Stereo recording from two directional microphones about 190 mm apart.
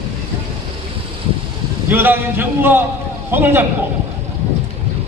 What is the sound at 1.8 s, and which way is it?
A man's voice, 10° right (ahead or behind).